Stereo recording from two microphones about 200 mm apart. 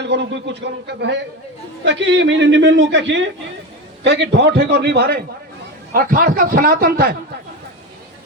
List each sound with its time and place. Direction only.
0.0 s a man's voice: 60° right (ahead or behind)